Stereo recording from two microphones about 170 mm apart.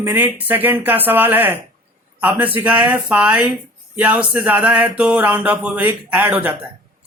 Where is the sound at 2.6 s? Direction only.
10° right (ahead or behind).